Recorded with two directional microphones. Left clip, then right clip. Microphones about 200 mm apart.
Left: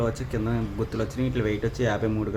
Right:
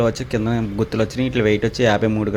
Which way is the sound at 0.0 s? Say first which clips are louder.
Right 8 dB; 20° right (ahead or behind).